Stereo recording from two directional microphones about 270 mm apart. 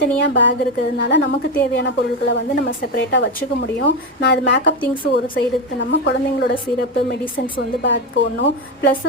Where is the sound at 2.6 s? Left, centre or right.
Left.